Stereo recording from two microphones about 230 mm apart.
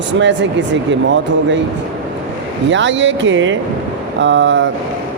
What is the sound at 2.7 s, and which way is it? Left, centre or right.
Speech, right.